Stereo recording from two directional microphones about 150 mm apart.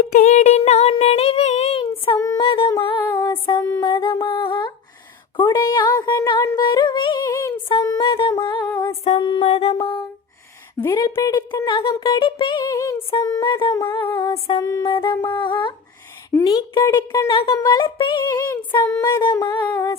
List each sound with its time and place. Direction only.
0.0 s a sound: 65° left (ahead or behind)
0.3 s child singing: 45° left (ahead or behind)
2.1 s female singing: 20° left (ahead or behind)
2.4 s music: 35° left (ahead or behind)
3.6 s humming: 20° left (ahead or behind)
5.4 s music: 25° left (ahead or behind)
10.8 s speech: 25° left (ahead or behind)
13.1 s music: 25° left (ahead or behind)
14.6 s speech: 20° left (ahead or behind)
14.8 s music: 35° left (ahead or behind)
16.3 s speech: 25° left (ahead or behind)
17.5 s music: 25° left (ahead or behind)
18.3 s speech: 20° left (ahead or behind)